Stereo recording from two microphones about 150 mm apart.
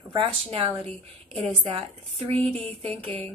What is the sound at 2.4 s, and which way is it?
Speech, 5° left (ahead or behind).